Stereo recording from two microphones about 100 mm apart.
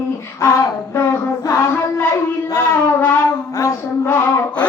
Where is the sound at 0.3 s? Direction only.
30° left (ahead or behind).